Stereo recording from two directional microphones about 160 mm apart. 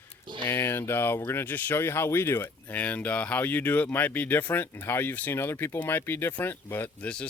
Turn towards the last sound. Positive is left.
turn(degrees=5)  # may be behind; listen again after turning